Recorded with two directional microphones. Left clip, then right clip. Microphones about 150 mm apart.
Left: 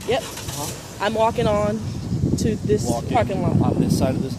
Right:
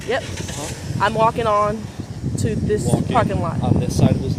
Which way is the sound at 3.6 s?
55° left (ahead or behind).